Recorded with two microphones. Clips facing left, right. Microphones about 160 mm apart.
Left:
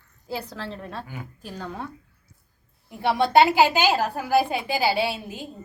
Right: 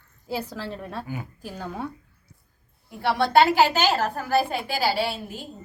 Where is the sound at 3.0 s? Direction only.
15° left (ahead or behind).